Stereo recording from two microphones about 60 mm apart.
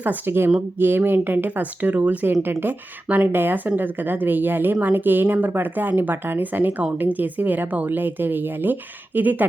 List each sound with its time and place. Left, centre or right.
0.0 s speech: right
2.2 s speech: right
2.6 s speech: right